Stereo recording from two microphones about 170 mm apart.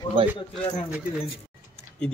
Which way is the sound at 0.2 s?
30° right (ahead or behind).